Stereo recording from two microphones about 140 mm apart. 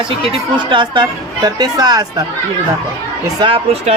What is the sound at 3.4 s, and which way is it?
Speech, 40° right (ahead or behind).